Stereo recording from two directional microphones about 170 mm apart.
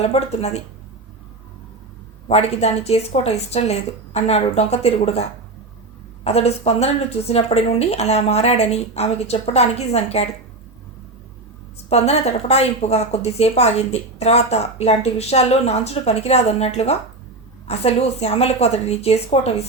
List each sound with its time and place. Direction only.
0.0 s a woman's voice: 40° left (ahead or behind)
2.2 s a woman's voice: 40° left (ahead or behind)
11.9 s a woman's voice: 40° left (ahead or behind)